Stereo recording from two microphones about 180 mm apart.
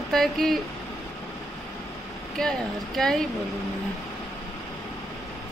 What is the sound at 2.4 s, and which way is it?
Speech, 5° left (ahead or behind).